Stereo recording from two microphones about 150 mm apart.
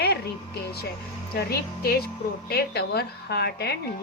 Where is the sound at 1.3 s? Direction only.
90° left.